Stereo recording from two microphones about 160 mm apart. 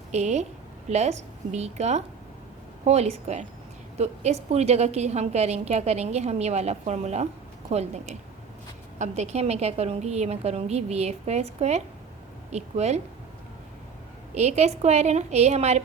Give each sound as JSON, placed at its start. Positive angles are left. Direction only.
{"t": 0.1, "sound": "a woman's voice", "side_deg": -45}
{"t": 14.3, "sound": "a woman's voice", "side_deg": -45}